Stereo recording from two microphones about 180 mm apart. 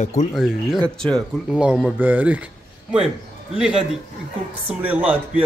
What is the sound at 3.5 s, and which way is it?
A woman's voice, 5° right (ahead or behind).